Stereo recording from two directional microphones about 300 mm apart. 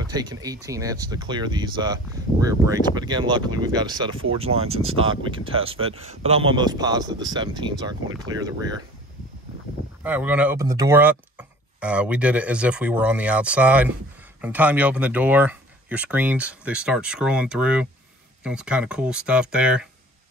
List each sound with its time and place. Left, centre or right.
0.0 s speech: centre
10.0 s speech: centre